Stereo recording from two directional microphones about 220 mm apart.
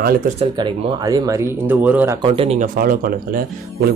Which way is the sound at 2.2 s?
25° right (ahead or behind).